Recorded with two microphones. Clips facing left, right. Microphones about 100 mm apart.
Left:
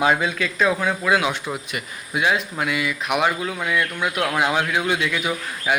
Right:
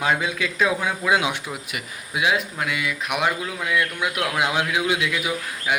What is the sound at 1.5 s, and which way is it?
A man's voice, 5° right (ahead or behind).